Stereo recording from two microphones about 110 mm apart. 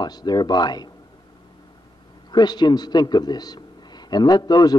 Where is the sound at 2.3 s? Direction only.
40° left (ahead or behind).